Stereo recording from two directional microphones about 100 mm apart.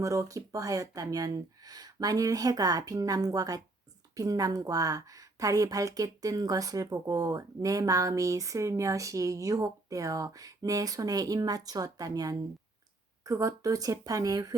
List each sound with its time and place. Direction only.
0.0 s a woman's voice: 35° right (ahead or behind)